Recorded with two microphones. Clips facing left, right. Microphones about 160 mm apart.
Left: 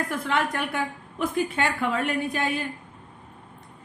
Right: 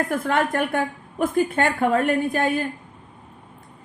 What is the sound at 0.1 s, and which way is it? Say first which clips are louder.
A woman's voice: right 4 dB; 50° right (ahead or behind).